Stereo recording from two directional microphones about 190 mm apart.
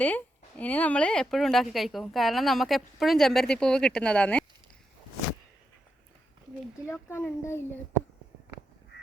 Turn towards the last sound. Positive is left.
turn(degrees=10)  # may be behind; listen again after turning